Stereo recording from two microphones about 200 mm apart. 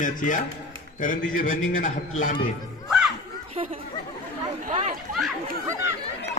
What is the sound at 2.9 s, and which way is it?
Children playing, centre (ahead or behind).